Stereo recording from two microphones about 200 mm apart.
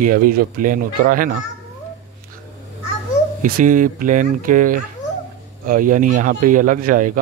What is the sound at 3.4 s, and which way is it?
A man's voice, 40° right (ahead or behind).